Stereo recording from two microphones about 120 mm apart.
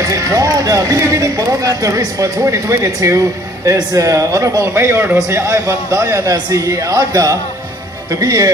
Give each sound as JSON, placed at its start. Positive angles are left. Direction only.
{"t": 0.0, "sound": "speech", "side_deg": -25}